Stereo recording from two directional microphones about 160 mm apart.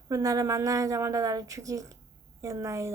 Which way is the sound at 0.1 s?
20° right (ahead or behind).